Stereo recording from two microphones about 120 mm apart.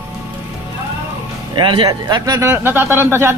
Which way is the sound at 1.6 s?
40° right (ahead or behind).